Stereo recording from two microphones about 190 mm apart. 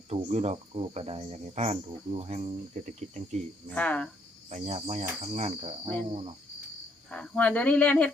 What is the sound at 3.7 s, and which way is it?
Speech, 5° left (ahead or behind).